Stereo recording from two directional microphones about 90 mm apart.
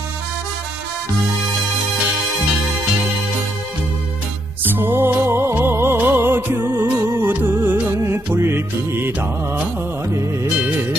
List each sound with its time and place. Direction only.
4.6 s music: 20° right (ahead or behind)